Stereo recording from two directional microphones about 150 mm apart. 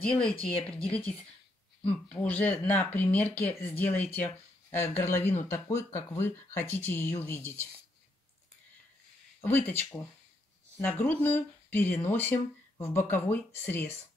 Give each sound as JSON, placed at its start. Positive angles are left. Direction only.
{"t": 0.0, "sound": "speech", "side_deg": 5}
{"t": 2.0, "sound": "speech", "side_deg": 10}
{"t": 9.4, "sound": "speech", "side_deg": 15}